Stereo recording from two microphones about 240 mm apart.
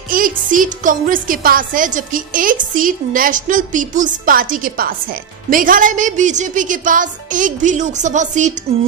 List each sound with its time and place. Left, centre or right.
0.1 s speech: right